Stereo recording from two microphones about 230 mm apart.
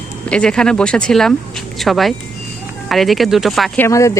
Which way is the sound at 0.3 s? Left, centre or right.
Centre.